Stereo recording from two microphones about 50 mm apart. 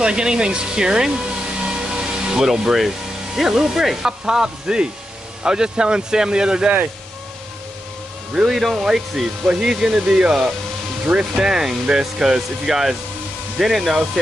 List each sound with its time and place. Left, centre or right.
0.0 s speech: centre
1.6 s music: centre
3.3 s speech: centre
8.5 s speech: centre